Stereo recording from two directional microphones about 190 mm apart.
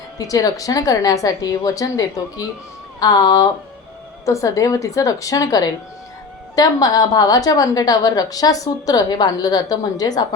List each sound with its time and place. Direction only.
0.2 s a woman's voice: 20° left (ahead or behind)